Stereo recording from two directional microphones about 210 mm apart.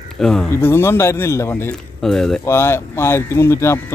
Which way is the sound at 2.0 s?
Centre (ahead or behind).